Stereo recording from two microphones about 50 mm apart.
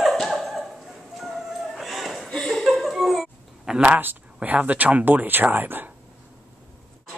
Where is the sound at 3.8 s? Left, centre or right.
Right.